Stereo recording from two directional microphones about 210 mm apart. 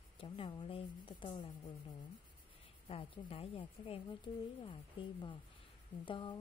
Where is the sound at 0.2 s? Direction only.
25° left (ahead or behind).